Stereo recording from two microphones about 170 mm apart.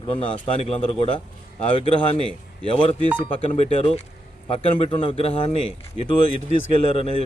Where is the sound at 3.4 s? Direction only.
40° left (ahead or behind).